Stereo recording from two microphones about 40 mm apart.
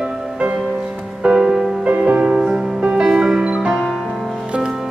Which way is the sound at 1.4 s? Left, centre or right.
Centre.